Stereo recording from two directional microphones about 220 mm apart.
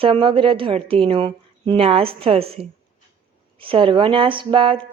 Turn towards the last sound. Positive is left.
turn(degrees=-25)  # may be behind; listen again after turning